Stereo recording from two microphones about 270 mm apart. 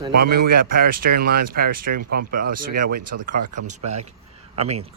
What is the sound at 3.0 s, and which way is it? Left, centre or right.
Speech, right.